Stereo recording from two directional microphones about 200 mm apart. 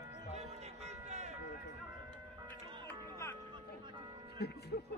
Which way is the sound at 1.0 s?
35° right (ahead or behind).